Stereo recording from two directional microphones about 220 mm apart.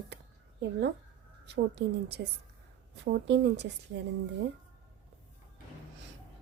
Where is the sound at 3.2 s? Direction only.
50° right (ahead or behind).